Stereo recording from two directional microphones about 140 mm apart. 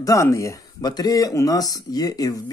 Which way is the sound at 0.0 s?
20° left (ahead or behind).